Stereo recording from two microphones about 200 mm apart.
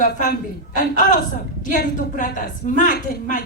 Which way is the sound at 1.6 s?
40° left (ahead or behind).